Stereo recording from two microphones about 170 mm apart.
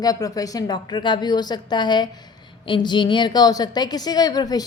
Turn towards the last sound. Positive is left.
turn(degrees=25)  # may be behind; listen again after turning